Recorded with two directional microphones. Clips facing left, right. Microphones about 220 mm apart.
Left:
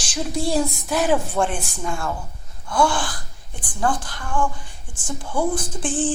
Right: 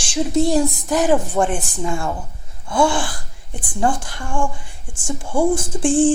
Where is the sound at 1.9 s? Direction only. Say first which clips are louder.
Right 2 dB; 20° right (ahead or behind).